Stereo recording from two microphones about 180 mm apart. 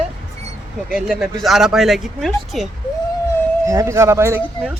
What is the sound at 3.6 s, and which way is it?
Speech, 15° right (ahead or behind).